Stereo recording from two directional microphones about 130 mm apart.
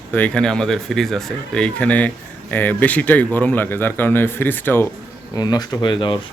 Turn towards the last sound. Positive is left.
turn(degrees=35)  # may be behind; listen again after turning